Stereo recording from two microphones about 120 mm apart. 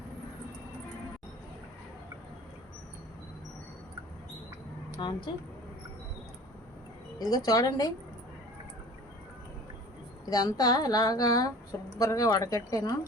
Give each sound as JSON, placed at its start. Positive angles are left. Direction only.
{"t": 4.9, "sound": "a woman's voice", "side_deg": 40}
{"t": 7.2, "sound": "a woman's voice", "side_deg": 30}
{"t": 10.2, "sound": "a woman's voice", "side_deg": 30}